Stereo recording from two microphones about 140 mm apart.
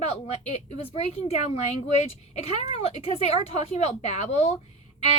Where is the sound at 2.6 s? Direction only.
50° left (ahead or behind).